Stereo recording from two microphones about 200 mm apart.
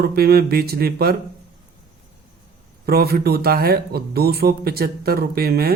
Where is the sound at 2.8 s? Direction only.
50° right (ahead or behind).